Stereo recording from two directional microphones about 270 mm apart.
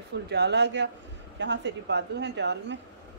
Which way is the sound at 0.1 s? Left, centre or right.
Right.